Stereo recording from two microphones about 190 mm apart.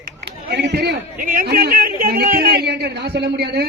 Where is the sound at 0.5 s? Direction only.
60° right (ahead or behind).